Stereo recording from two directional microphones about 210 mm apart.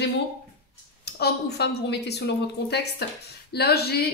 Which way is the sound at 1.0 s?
50° left (ahead or behind).